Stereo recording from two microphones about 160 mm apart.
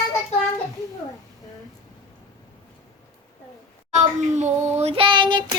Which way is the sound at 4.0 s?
45° right (ahead or behind).